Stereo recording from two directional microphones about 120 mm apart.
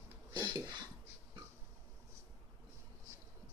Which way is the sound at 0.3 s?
35° right (ahead or behind).